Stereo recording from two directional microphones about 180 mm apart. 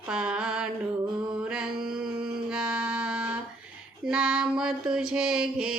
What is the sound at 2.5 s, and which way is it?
Music, 5° right (ahead or behind).